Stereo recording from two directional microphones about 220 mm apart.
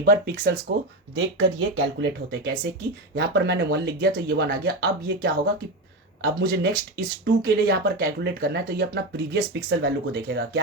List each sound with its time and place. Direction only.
0.0 s speech: 40° right (ahead or behind)
0.7 s speech: 55° right (ahead or behind)
6.4 s speech: 45° right (ahead or behind)